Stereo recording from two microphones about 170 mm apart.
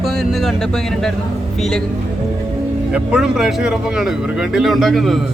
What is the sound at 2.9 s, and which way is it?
Speech, 5° right (ahead or behind).